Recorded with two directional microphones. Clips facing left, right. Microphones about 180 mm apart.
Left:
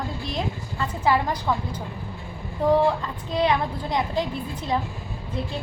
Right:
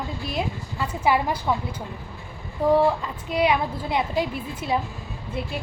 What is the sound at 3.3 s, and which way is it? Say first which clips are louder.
A woman's voice: right 1 dB; 10° right (ahead or behind).